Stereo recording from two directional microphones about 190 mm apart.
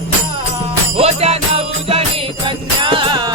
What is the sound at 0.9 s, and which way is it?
Music, 35° right (ahead or behind).